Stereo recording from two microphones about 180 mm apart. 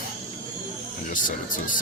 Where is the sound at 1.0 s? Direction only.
45° left (ahead or behind).